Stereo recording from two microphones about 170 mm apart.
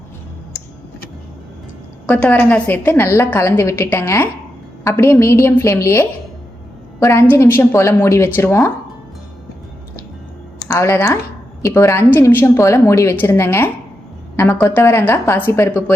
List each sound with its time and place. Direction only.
2.0 s a woman's voice: 10° left (ahead or behind)
10.7 s a woman's voice: 15° left (ahead or behind)